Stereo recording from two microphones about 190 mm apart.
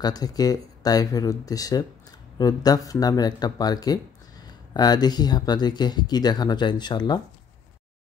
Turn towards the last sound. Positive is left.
turn(degrees=25)  # may be behind; listen again after turning